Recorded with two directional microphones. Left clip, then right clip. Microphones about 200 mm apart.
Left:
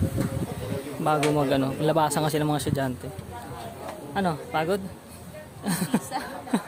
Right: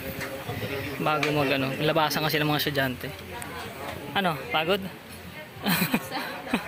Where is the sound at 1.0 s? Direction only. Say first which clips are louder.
Left 2 dB; 20° left (ahead or behind).